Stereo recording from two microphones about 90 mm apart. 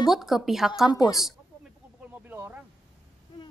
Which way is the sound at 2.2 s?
25° right (ahead or behind).